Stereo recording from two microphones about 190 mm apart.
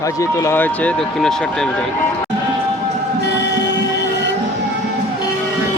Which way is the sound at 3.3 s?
65° left (ahead or behind).